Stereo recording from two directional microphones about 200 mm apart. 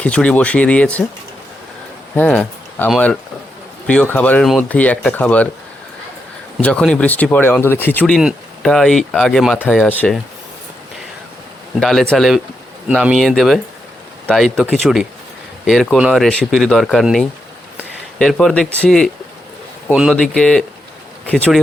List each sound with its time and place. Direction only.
0.0 s speech: 5° left (ahead or behind)
2.1 s speech: 5° left (ahead or behind)
6.6 s speech: 5° left (ahead or behind)
11.8 s speech: centre (ahead or behind)